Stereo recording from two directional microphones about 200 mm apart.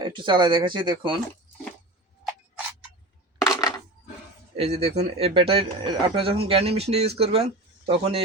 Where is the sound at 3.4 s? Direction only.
15° left (ahead or behind).